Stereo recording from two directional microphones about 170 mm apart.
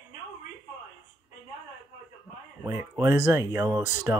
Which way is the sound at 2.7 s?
15° right (ahead or behind).